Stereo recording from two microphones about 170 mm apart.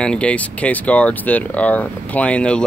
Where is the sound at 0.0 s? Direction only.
5° left (ahead or behind).